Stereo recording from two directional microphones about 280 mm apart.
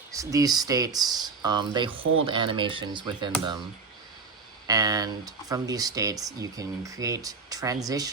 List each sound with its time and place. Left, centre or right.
0.1 s speech: centre
4.6 s speech: centre